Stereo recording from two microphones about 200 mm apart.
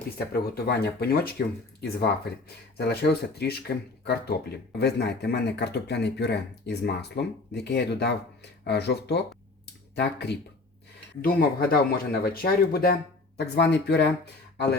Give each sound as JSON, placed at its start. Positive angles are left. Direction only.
{"t": 0.3, "sound": "speech", "side_deg": 50}
{"t": 11.2, "sound": "speech", "side_deg": 45}